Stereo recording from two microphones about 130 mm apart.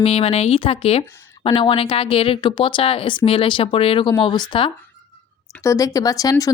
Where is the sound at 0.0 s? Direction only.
50° left (ahead or behind).